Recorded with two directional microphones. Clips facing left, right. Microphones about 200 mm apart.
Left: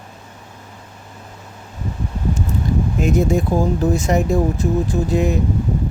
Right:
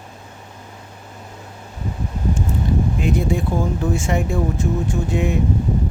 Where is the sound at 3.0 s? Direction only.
45° left (ahead or behind).